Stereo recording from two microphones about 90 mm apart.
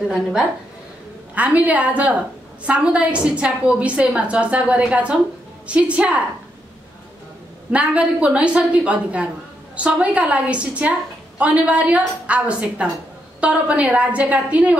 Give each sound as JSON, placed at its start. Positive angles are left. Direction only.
{"t": 0.1, "sound": "a woman's voice", "side_deg": -5}
{"t": 7.7, "sound": "a woman's voice", "side_deg": -15}